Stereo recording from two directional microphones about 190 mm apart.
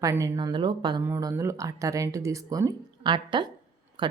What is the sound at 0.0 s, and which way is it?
Speech, 15° right (ahead or behind).